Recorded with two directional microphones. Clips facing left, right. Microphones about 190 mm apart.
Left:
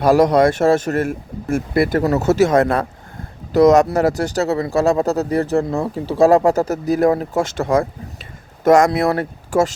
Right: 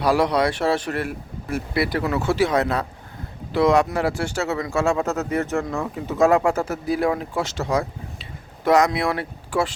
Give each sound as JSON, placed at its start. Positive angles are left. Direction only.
{"t": 0.0, "sound": "speech", "side_deg": 45}